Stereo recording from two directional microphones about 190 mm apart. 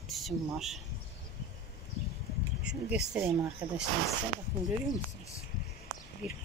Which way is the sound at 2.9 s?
5° right (ahead or behind).